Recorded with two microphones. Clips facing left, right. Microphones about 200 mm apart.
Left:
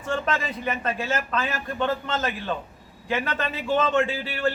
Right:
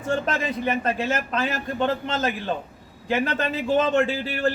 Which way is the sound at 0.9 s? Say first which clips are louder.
Right 2 dB; 20° right (ahead or behind).